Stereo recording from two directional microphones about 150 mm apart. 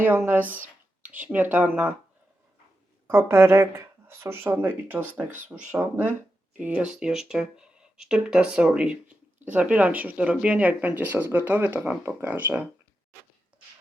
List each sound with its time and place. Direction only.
0.0 s speech: 15° right (ahead or behind)
3.1 s speech: 15° right (ahead or behind)